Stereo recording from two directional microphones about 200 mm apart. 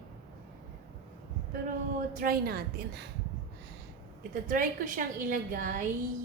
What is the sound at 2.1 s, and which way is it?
A woman's voice, 45° right (ahead or behind).